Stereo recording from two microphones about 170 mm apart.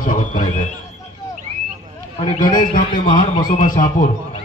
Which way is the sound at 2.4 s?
55° left (ahead or behind).